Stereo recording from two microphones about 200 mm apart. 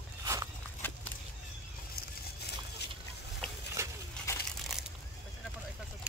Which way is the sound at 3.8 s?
15° right (ahead or behind).